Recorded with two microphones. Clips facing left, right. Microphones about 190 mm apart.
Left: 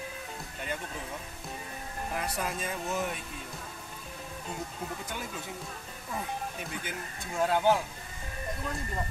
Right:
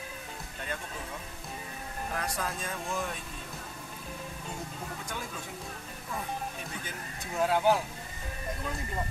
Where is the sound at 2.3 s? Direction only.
15° left (ahead or behind).